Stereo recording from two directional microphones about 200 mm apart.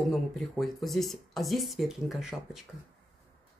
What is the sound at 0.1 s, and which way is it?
Speech, centre (ahead or behind).